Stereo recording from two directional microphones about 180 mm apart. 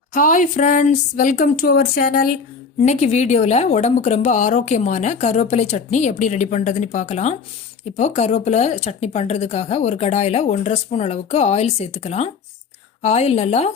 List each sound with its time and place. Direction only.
0.1 s speech: 45° left (ahead or behind)
2.8 s speech: 40° left (ahead or behind)